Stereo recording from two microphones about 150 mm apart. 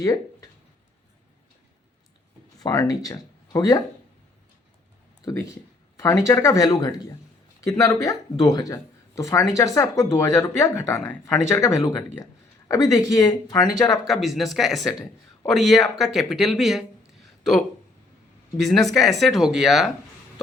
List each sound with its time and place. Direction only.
2.6 s speech: 25° left (ahead or behind)
5.2 s speech: 20° left (ahead or behind)
14.1 s speech: centre (ahead or behind)
18.5 s speech: centre (ahead or behind)